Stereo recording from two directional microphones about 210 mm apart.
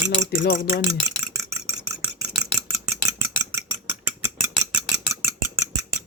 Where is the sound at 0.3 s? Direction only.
45° left (ahead or behind).